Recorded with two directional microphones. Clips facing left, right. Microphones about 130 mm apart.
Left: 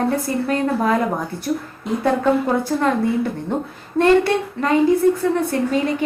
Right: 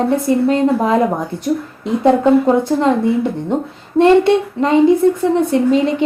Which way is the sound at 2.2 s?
20° right (ahead or behind).